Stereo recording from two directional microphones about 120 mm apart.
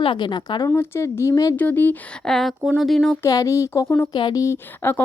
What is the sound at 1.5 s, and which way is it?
Speech, 15° left (ahead or behind).